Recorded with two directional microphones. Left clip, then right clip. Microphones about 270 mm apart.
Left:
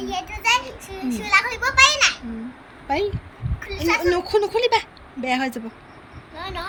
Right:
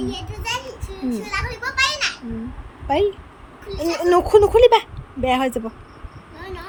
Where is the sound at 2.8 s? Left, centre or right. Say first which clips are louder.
Right 4 dB; centre.